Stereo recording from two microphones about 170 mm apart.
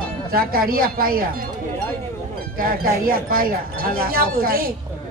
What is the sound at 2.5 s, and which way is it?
Speech, 60° right (ahead or behind).